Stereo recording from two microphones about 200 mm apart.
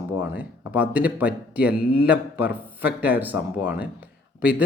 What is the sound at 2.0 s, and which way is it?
Speech, 5° right (ahead or behind).